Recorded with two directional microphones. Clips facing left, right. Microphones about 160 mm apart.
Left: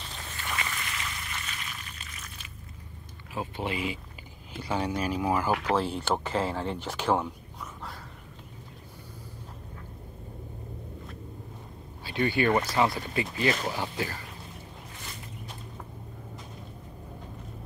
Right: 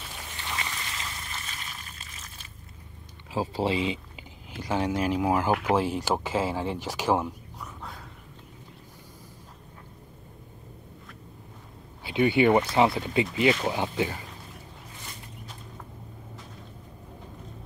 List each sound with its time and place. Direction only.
0.1 s a sound: 20° right (ahead or behind)
3.3 s speech: 30° right (ahead or behind)
4.6 s speech: 10° right (ahead or behind)
12.0 s speech: 20° right (ahead or behind)